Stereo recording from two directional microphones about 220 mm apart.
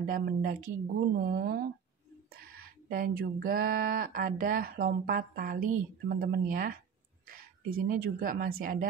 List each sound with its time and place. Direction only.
0.0 s speech: 40° right (ahead or behind)